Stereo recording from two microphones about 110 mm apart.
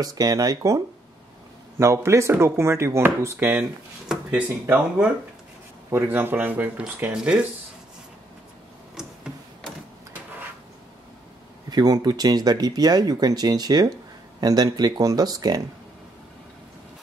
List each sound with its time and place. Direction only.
0.0 s speech: 35° right (ahead or behind)
4.1 s speech: 10° right (ahead or behind)
11.7 s speech: 35° right (ahead or behind)